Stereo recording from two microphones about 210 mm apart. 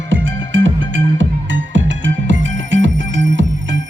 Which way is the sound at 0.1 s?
65° right (ahead or behind).